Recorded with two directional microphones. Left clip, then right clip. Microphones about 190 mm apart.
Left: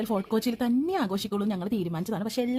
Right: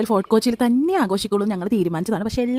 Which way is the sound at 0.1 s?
35° right (ahead or behind).